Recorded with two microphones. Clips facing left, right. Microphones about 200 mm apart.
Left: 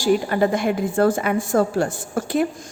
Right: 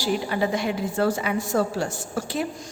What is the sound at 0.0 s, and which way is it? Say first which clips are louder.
A woman's voice: left 6 dB; 50° left (ahead or behind).